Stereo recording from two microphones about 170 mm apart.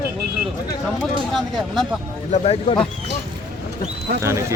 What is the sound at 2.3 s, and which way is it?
Speech, 35° left (ahead or behind).